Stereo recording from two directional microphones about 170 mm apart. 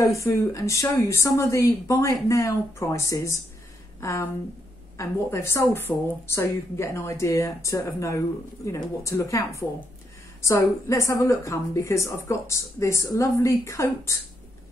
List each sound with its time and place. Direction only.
0.0 s a woman's voice: 15° left (ahead or behind)